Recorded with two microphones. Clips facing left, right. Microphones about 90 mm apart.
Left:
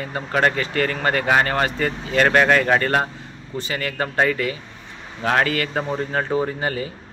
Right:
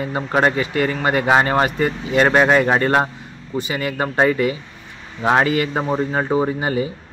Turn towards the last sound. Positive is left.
turn(degrees=-20)  # may be behind; listen again after turning